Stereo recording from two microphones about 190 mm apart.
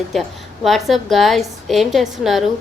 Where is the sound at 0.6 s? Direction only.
Centre (ahead or behind).